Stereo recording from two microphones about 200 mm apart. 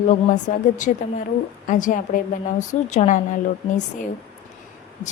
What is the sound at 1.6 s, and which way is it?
A woman's voice, 40° left (ahead or behind).